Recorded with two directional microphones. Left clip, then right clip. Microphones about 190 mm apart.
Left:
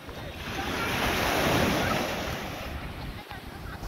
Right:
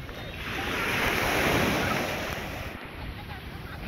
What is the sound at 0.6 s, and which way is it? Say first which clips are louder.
Waves: right 1 dB; 65° left (ahead or behind).